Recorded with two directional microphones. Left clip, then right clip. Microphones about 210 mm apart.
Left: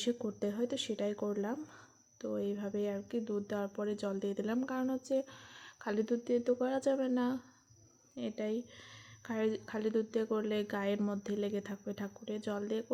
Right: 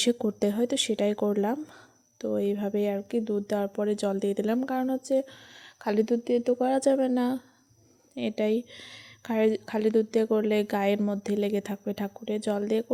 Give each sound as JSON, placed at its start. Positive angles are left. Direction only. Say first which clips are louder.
{"t": 0.0, "sound": "speech", "louder": "right 10 dB", "side_deg": -40}